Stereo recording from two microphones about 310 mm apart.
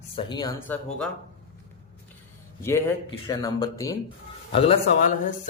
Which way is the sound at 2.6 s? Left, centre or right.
Centre.